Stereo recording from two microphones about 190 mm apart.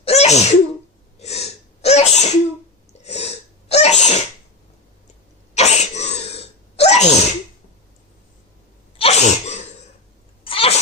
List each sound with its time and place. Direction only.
0.0 s sneeze: 35° left (ahead or behind)
5.5 s sneeze: 35° left (ahead or behind)
9.0 s sneeze: 35° left (ahead or behind)